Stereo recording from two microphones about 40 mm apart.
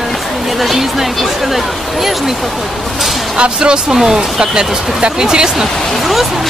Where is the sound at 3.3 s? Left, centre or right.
Right.